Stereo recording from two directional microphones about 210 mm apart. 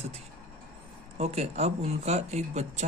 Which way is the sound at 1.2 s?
30° right (ahead or behind).